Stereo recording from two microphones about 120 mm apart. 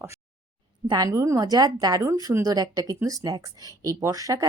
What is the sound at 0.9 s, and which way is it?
A woman's voice, 30° right (ahead or behind).